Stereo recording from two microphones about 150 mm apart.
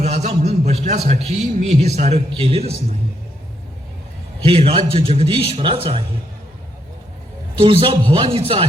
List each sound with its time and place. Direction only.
0.0 s a man's voice: 45° right (ahead or behind)
4.4 s a man's voice: 35° right (ahead or behind)
7.6 s a man's voice: 35° right (ahead or behind)